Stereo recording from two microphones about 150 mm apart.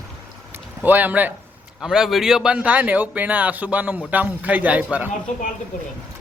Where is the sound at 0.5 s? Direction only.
10° right (ahead or behind).